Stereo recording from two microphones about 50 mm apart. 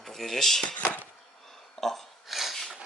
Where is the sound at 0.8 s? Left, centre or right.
Left.